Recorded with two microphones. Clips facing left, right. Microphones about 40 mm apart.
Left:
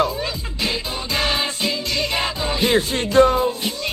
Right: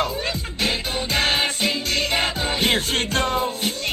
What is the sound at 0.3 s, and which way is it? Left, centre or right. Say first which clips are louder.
Music: right 1 dB; right.